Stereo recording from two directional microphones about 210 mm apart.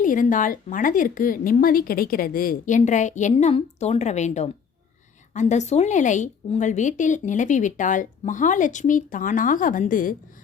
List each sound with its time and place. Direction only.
0.0 s a woman's voice: 40° left (ahead or behind)